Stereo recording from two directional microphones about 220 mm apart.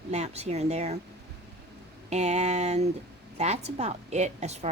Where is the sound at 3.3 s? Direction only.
30° right (ahead or behind).